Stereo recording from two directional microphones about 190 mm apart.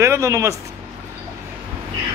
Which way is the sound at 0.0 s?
15° right (ahead or behind).